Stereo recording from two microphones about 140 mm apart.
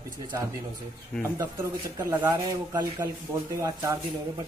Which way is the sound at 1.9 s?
20° right (ahead or behind).